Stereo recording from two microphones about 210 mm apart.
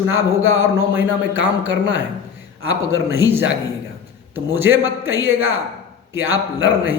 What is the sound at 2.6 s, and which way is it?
Speech, 70° right (ahead or behind).